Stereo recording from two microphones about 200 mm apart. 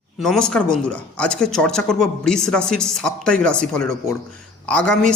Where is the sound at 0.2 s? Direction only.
Centre (ahead or behind).